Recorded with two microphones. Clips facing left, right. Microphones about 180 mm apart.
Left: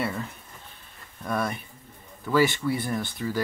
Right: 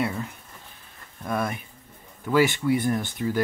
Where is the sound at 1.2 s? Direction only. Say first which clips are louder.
Right 1 dB; 10° right (ahead or behind).